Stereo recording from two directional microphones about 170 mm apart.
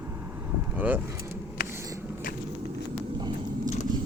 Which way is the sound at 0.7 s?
10° right (ahead or behind).